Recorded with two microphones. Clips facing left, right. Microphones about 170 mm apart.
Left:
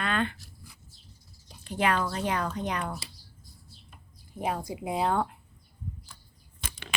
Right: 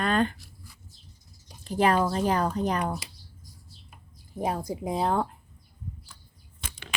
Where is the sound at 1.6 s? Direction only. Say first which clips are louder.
Right 4 dB; 40° right (ahead or behind).